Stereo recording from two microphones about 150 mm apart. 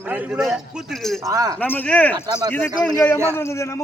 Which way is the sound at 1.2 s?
20° right (ahead or behind).